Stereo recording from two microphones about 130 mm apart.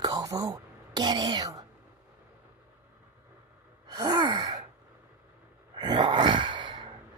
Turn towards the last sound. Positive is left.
turn(degrees=-40)  # may be behind; listen again after turning